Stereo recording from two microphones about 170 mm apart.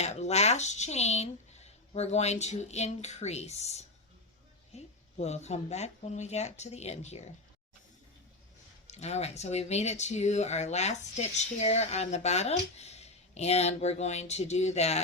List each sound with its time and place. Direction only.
0.0 s speech: 40° left (ahead or behind)
8.9 s speech: 40° left (ahead or behind)